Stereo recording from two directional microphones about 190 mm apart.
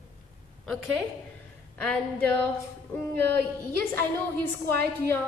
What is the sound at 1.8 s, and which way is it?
Speech, 10° left (ahead or behind).